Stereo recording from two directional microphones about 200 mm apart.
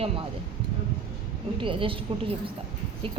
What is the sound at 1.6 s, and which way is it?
Speech, 25° right (ahead or behind).